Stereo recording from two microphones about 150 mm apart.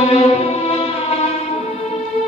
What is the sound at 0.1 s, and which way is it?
Music, 45° left (ahead or behind).